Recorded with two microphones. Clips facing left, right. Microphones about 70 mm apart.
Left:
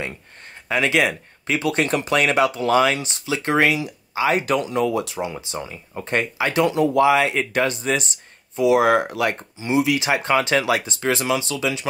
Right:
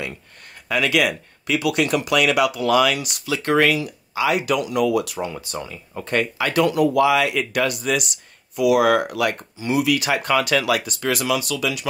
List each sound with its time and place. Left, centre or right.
0.7 s speech: left